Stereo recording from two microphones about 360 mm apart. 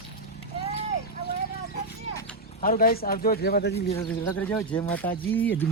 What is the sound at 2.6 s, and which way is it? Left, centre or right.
Speech, left.